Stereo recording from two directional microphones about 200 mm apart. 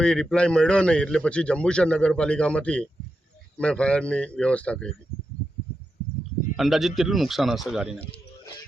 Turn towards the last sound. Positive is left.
turn(degrees=-5)  # may be behind; listen again after turning